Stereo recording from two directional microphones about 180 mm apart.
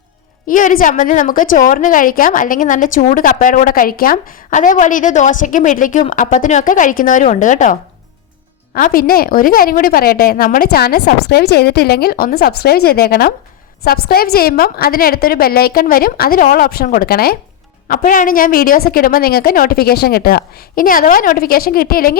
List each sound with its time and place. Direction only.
0.4 s a woman's voice: 50° left (ahead or behind)